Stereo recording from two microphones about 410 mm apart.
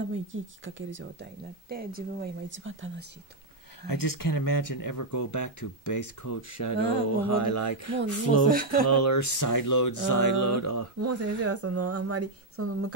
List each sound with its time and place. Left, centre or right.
0.0 s speech: right
3.8 s speech: left
8.5 s speech: right
8.8 s speech: left
11.0 s speech: right